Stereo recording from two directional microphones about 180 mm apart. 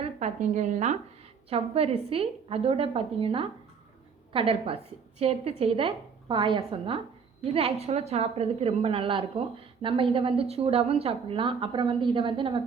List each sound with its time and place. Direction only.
0.0 s a woman's voice: 40° right (ahead or behind)